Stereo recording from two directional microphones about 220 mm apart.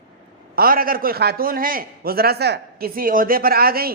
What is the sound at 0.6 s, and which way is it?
A man's voice, 40° right (ahead or behind).